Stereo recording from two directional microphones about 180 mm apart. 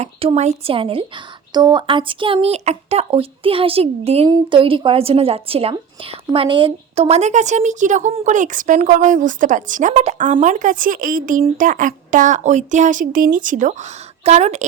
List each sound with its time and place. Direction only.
0.0 s a woman's voice: 35° right (ahead or behind)